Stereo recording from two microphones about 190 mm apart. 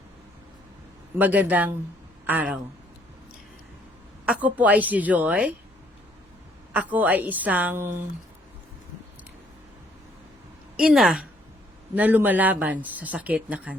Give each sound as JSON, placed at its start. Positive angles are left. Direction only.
{"t": 1.2, "sound": "speech", "side_deg": -10}
{"t": 4.3, "sound": "speech", "side_deg": -10}
{"t": 6.7, "sound": "speech", "side_deg": -10}
{"t": 10.8, "sound": "a woman's voice", "side_deg": 0}